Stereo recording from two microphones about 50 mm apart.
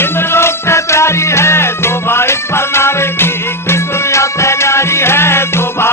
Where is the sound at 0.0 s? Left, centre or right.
Left.